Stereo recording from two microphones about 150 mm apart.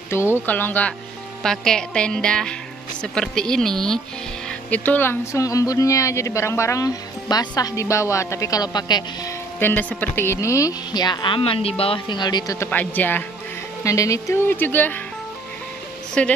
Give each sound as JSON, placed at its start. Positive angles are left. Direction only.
{"t": 0.1, "sound": "speech", "side_deg": 15}
{"t": 9.6, "sound": "speech", "side_deg": 10}
{"t": 12.6, "sound": "speech", "side_deg": 10}
{"t": 16.2, "sound": "speech", "side_deg": 10}